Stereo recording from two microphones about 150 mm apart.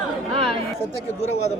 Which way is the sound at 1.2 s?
45° left (ahead or behind).